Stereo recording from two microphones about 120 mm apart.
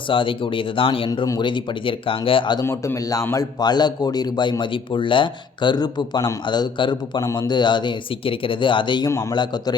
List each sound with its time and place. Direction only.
0.1 s speech: 45° left (ahead or behind)
2.6 s a man's voice: 25° left (ahead or behind)